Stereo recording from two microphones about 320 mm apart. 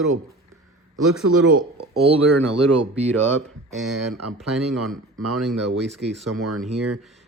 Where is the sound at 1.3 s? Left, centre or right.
Right.